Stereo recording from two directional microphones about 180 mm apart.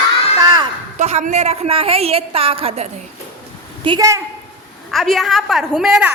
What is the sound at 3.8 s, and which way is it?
Speech, 20° right (ahead or behind).